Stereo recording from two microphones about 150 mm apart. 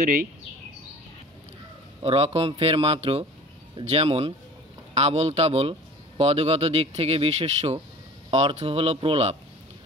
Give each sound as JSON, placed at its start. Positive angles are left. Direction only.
{"t": 2.0, "sound": "a man's voice", "side_deg": -40}